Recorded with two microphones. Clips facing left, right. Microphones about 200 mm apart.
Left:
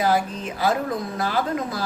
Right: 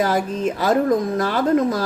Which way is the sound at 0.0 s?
45° right (ahead or behind).